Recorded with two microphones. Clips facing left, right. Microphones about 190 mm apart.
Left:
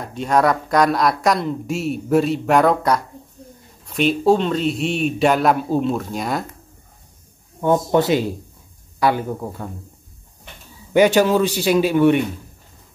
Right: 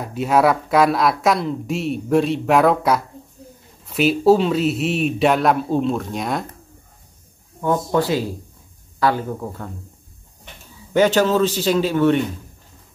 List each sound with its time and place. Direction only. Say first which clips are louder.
0.0 s speech: right 1 dB; 5° right (ahead or behind)
7.6 s a man's voice: left 3 dB; 20° left (ahead or behind)
10.9 s a man's voice: left 2 dB; 10° left (ahead or behind)